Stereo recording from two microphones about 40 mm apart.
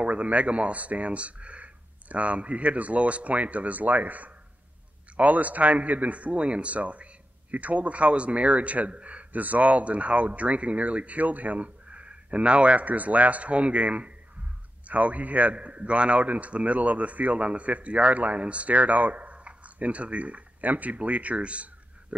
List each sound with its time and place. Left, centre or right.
0.0 s a man's voice: right